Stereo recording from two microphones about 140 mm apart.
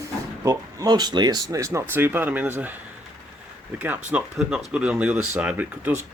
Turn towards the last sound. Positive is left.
turn(degrees=-10)  # may be behind; listen again after turning